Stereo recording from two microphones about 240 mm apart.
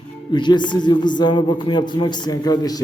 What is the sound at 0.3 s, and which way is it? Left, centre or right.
A man's voice, centre.